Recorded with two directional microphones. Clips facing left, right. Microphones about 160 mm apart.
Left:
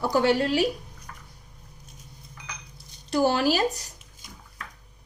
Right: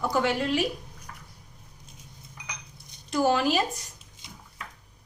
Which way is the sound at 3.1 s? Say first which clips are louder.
Left 1 dB; 35° left (ahead or behind).